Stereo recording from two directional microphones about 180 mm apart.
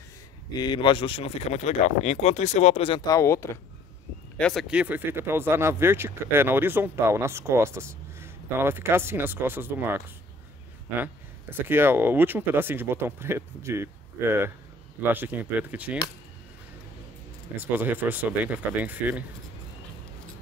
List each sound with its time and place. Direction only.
0.6 s speech: 25° left (ahead or behind)
3.1 s speech: 15° left (ahead or behind)
4.4 s speech: centre (ahead or behind)
11.6 s speech: 10° right (ahead or behind)
17.6 s speech: 10° right (ahead or behind)